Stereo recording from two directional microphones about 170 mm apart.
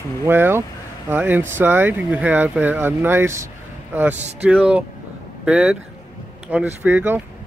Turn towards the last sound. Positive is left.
turn(degrees=-10)  # may be behind; listen again after turning